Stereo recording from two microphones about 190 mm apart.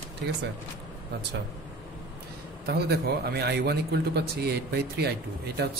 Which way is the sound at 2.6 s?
55° right (ahead or behind).